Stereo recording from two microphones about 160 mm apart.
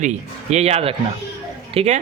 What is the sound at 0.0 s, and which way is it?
A man's voice, 45° right (ahead or behind).